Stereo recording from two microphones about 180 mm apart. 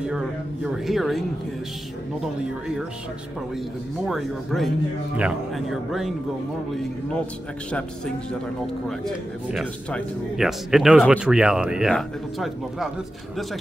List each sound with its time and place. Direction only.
0.0 s speech: 5° right (ahead or behind)
4.0 s speech: centre (ahead or behind)
8.8 s speech: centre (ahead or behind)